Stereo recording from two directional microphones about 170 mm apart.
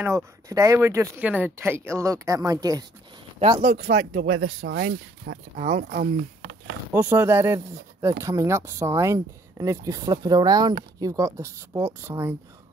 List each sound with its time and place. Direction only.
0.0 s speech: 15° right (ahead or behind)
3.6 s speech: 55° right (ahead or behind)
3.9 s speech: 90° right
5.6 s speech: 45° right (ahead or behind)
6.9 s speech: 10° right (ahead or behind)